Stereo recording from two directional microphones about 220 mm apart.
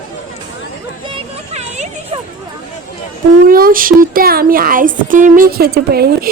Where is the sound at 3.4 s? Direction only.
40° right (ahead or behind).